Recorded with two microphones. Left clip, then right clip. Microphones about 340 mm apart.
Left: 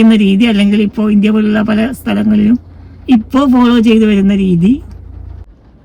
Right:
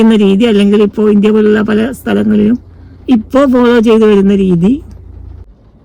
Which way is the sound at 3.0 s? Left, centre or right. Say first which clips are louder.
Right 2 dB; centre.